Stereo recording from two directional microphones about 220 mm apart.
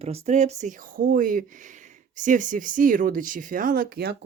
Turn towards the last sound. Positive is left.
turn(degrees=-45)  # may be behind; listen again after turning